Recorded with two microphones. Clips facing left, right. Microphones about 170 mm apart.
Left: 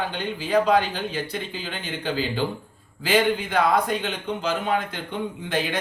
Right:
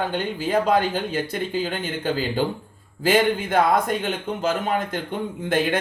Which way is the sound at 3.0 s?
45° right (ahead or behind).